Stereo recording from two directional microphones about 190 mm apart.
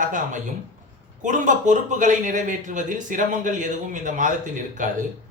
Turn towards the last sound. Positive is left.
turn(degrees=-40)  # may be behind; listen again after turning